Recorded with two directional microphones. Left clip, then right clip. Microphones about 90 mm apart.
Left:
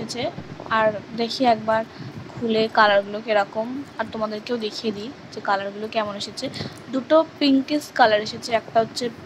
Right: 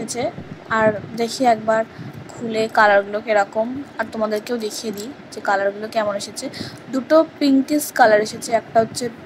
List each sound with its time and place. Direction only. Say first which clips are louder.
0.0 s a woman's voice: right 3 dB; 30° right (ahead or behind)